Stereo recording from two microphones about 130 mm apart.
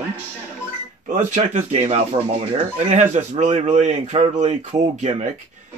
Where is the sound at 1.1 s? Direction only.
70° right (ahead or behind).